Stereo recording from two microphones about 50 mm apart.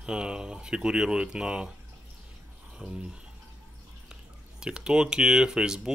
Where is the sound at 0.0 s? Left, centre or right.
Centre.